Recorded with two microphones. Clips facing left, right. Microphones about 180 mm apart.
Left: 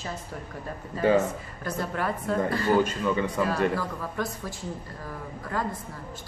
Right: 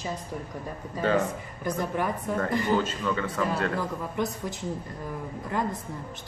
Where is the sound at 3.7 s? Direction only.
20° right (ahead or behind).